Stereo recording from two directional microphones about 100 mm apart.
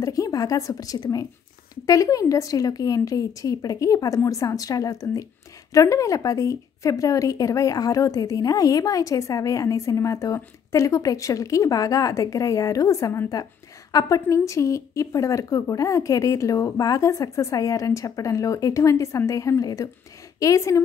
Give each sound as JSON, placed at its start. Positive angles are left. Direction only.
{"t": 0.0, "sound": "a woman's voice", "side_deg": 35}